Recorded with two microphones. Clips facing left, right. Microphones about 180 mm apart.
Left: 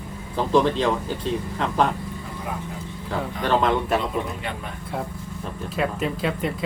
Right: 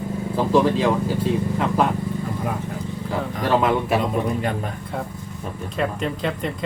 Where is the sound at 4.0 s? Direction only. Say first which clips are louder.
Right 5 dB; 45° right (ahead or behind).